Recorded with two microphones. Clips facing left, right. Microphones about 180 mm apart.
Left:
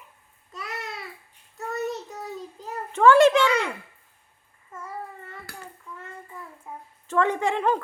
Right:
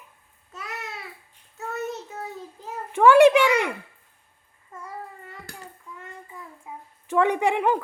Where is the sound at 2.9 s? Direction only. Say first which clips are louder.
Right 2 dB; 10° right (ahead or behind).